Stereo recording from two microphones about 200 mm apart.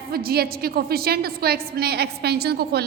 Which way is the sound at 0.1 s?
50° right (ahead or behind).